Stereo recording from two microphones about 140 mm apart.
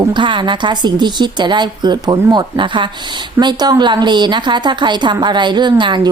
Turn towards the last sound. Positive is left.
turn(degrees=-35)  # may be behind; listen again after turning